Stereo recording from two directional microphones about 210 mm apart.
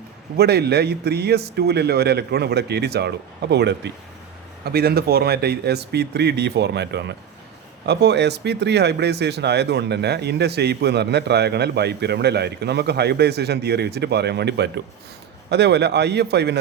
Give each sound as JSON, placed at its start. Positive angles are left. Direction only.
{"t": 0.3, "sound": "speech", "side_deg": -50}